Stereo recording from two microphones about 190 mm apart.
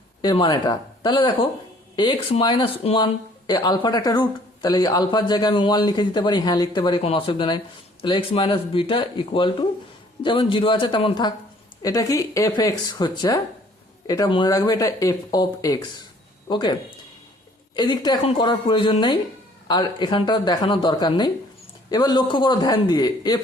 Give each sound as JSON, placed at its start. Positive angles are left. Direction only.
{"t": 0.2, "sound": "speech", "side_deg": 25}
{"t": 17.7, "sound": "speech", "side_deg": 20}